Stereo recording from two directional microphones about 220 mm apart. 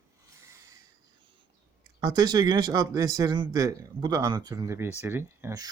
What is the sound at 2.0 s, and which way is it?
Speech, 20° right (ahead or behind).